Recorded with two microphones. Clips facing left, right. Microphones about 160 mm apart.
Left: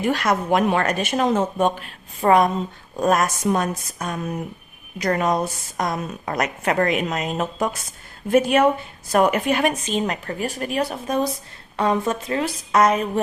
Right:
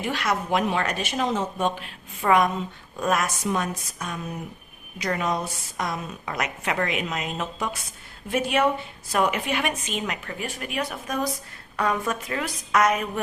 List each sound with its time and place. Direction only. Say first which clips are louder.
0.0 s a woman's voice: left 6 dB; 45° left (ahead or behind)